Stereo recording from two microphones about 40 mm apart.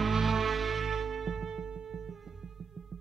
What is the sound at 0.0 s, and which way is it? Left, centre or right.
Music, centre.